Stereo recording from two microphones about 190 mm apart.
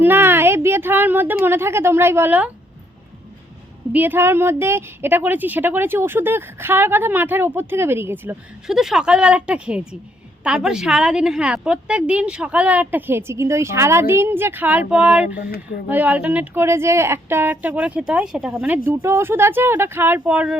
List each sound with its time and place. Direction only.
0.0 s speech: 10° right (ahead or behind)
3.9 s a woman's voice: 10° right (ahead or behind)
15.4 s speech: 55° left (ahead or behind)
15.9 s a woman's voice: 10° right (ahead or behind)